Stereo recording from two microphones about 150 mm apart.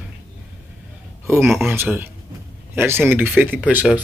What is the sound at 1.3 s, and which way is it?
Speech, 15° right (ahead or behind).